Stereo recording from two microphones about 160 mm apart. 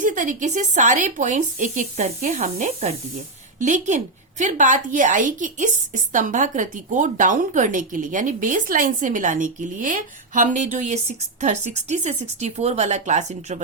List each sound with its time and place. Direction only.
0.0 s a woman's voice: 50° right (ahead or behind)